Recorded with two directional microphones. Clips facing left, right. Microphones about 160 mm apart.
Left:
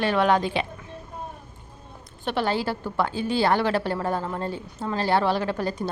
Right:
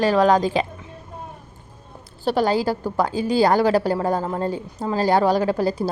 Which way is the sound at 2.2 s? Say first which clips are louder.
Right 6 dB; 40° right (ahead or behind).